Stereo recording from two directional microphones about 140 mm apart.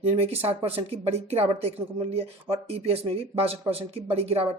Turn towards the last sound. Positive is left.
turn(degrees=-45)  # may be behind; listen again after turning